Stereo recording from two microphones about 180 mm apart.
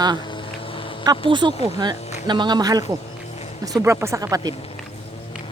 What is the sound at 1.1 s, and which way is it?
A man's voice, 25° right (ahead or behind).